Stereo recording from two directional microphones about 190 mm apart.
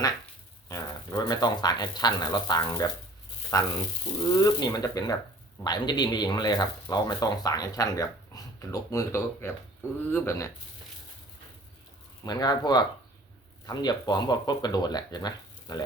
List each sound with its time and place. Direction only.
0.7 s speech: 20° left (ahead or behind)
12.2 s speech: 20° left (ahead or behind)